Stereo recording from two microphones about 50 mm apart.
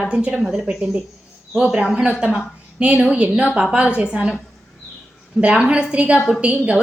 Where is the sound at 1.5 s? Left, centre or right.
Centre.